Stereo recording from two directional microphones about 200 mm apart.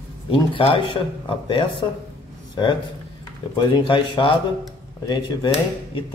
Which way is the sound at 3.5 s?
25° left (ahead or behind).